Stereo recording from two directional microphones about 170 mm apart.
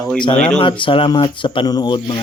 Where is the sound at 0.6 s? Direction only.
30° left (ahead or behind).